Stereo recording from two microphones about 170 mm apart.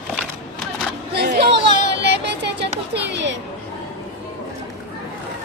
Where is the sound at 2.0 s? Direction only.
90° right.